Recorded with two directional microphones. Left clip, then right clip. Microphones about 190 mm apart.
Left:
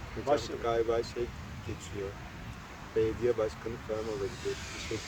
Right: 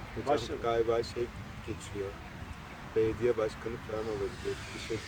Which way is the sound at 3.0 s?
15° right (ahead or behind).